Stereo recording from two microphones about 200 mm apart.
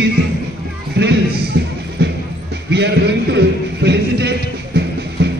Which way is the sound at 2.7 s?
60° right (ahead or behind).